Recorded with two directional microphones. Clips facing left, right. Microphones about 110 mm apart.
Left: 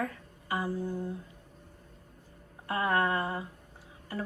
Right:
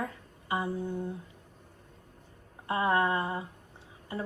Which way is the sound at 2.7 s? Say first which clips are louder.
Right 1 dB; 25° right (ahead or behind).